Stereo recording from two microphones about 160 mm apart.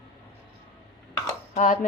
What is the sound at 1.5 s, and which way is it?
Speech, 50° left (ahead or behind).